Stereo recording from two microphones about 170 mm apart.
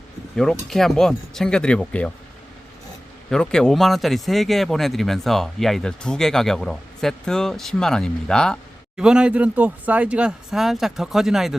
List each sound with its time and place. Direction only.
0.3 s speech: centre (ahead or behind)
3.2 s speech: 5° left (ahead or behind)